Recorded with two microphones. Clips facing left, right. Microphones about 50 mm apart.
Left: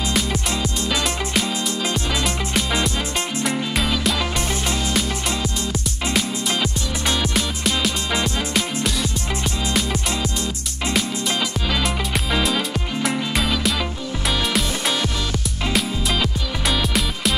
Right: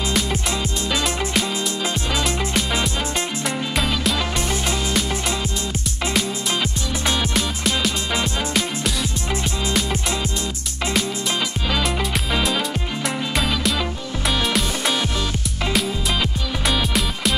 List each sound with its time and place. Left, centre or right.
2.2 s music: centre
7.1 s music: centre
11.7 s music: centre